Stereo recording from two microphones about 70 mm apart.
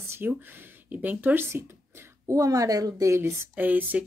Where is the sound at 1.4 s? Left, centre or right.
Right.